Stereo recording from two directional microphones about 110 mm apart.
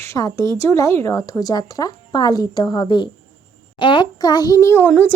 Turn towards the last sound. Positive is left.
turn(degrees=15)  # may be behind; listen again after turning